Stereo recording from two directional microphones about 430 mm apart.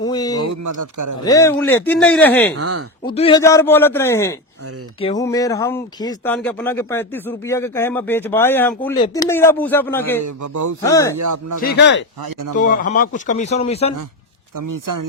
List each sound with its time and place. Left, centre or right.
0.0 s a sound: centre
0.5 s speech: right
1.2 s speech: centre
2.6 s speech: right
3.1 s speech: centre
10.2 s speech: right
10.8 s speech: centre
11.2 s speech: right
11.6 s a man's voice: left
12.2 s speech: right
12.5 s speech: centre
14.5 s speech: right